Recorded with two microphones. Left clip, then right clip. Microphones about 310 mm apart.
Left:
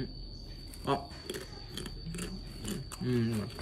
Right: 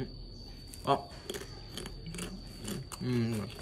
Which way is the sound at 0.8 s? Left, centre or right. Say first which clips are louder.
Right 3 dB; centre.